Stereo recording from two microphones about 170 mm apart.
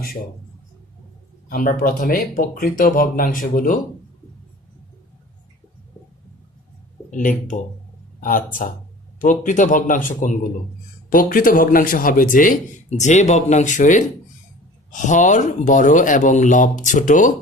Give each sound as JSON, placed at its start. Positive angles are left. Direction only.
{"t": 1.5, "sound": "speech", "side_deg": 55}
{"t": 7.1, "sound": "speech", "side_deg": 50}
{"t": 9.1, "sound": "speech", "side_deg": 50}